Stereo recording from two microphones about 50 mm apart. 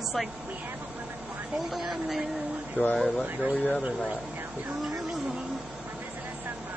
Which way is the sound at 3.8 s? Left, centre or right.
Right.